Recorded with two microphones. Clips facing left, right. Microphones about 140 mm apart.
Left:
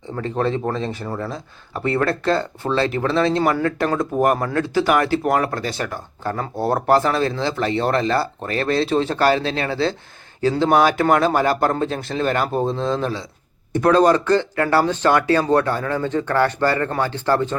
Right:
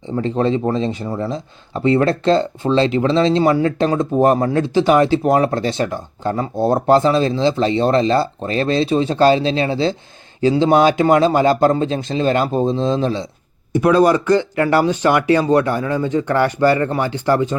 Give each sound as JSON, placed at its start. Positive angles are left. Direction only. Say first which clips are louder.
{"t": 0.7, "sound": "speech", "louder": "right 5 dB", "side_deg": -20}
{"t": 13.7, "sound": "speech", "louder": "right 2 dB", "side_deg": -10}